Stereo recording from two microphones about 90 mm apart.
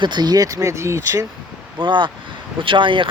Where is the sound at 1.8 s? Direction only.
65° right (ahead or behind).